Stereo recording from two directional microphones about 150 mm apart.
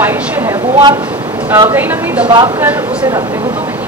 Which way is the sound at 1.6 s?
15° right (ahead or behind).